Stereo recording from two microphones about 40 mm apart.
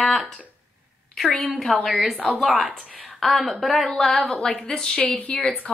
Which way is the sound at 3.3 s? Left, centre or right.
Centre.